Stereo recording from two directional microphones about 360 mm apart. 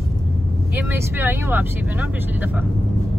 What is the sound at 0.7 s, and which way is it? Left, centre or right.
Speech, centre.